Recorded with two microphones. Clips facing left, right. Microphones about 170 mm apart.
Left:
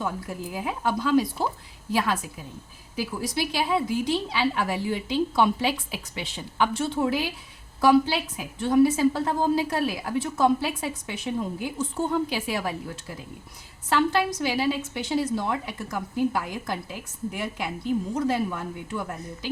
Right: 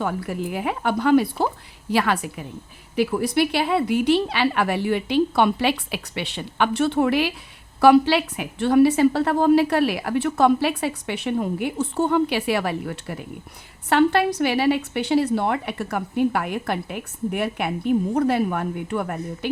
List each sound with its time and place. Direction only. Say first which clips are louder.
0.0 s a woman's voice: right 5 dB; 70° right (ahead or behind)